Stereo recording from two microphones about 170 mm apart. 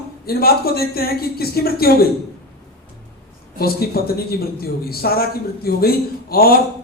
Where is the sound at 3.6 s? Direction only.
65° left (ahead or behind).